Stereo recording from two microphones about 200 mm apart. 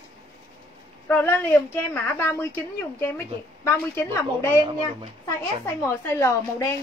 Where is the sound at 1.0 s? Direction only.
10° left (ahead or behind).